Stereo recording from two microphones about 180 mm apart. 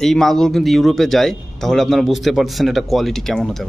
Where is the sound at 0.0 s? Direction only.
Centre (ahead or behind).